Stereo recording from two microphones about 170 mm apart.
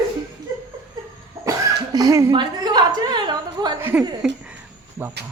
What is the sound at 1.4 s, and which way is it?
Cough, 20° right (ahead or behind).